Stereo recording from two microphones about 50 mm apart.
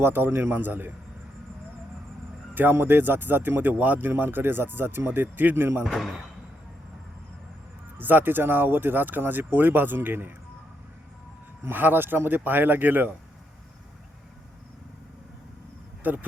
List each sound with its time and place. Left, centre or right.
0.0 s speech: right
0.3 s speech: right
0.5 s speech: right
2.6 s speech: right
7.9 s speech: right
11.7 s speech: right
16.0 s speech: right